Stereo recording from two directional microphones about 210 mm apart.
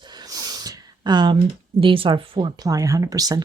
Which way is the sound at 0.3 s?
15° right (ahead or behind).